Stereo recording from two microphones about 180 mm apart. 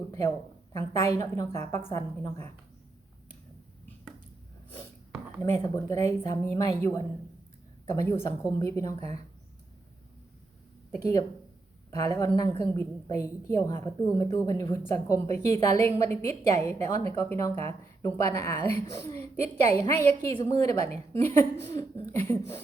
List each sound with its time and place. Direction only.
0.1 s a woman's voice: 15° left (ahead or behind)
5.4 s a woman's voice: 15° left (ahead or behind)
11.9 s a woman's voice: 20° left (ahead or behind)